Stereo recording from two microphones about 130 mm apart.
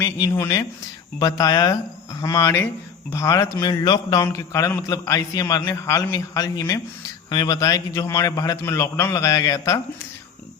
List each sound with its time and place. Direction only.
0.0 s a man's voice: 20° left (ahead or behind)